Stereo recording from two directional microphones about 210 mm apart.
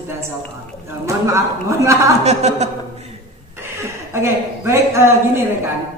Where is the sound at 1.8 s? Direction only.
15° right (ahead or behind).